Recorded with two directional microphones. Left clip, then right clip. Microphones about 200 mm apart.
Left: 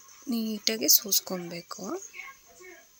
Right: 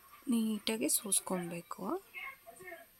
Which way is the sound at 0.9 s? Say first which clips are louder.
Left 13 dB; 10° right (ahead or behind).